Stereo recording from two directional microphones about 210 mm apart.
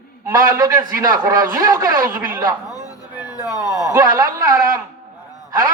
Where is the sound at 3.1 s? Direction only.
5° right (ahead or behind).